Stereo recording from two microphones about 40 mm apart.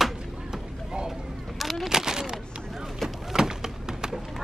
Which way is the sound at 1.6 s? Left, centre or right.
Centre.